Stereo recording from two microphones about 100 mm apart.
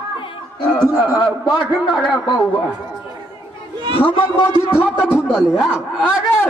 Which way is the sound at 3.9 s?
60° left (ahead or behind).